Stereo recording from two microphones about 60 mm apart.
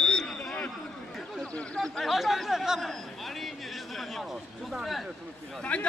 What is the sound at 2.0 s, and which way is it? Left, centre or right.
Speech, centre.